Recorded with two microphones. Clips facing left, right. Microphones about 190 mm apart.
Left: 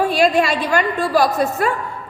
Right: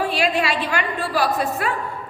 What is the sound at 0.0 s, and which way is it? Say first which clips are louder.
A woman's voice: left 6 dB; 45° left (ahead or behind).